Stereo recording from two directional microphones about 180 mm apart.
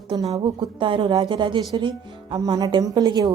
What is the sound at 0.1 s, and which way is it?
A woman's voice, 20° right (ahead or behind).